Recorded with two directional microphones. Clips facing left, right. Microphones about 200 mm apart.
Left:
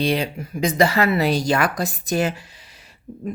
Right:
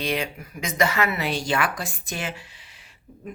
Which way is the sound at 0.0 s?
30° left (ahead or behind).